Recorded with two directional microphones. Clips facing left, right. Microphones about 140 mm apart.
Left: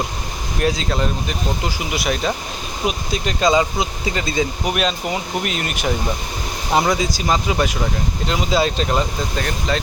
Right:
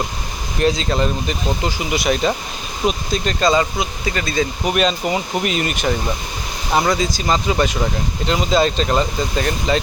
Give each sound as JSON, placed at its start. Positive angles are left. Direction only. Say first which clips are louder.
{"t": 0.6, "sound": "speech", "louder": "right 3 dB", "side_deg": 5}
{"t": 4.7, "sound": "speech", "louder": "right 3 dB", "side_deg": 0}